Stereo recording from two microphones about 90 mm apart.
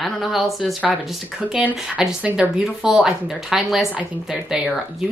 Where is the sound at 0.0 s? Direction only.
Centre (ahead or behind).